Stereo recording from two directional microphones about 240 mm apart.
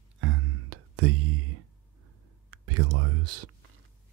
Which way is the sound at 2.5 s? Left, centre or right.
Right.